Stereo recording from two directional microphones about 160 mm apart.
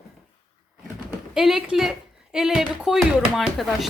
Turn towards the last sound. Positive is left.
turn(degrees=0)  # may be behind; listen again after turning